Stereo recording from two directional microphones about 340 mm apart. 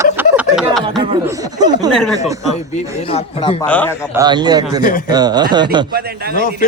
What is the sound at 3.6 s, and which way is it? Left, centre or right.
Speech, centre.